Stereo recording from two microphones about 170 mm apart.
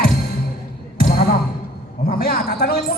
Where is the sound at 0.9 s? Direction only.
65° left (ahead or behind).